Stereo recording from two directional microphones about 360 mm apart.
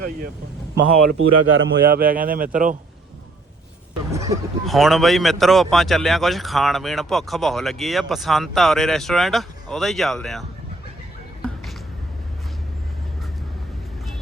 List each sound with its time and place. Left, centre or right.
1.2 s speech: right
4.1 s speech: centre